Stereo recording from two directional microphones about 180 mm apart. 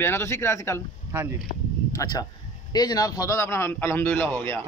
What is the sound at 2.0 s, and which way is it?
A man's voice, 20° left (ahead or behind).